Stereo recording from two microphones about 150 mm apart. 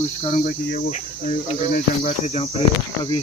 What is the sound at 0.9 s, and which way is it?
Cricket, 55° left (ahead or behind).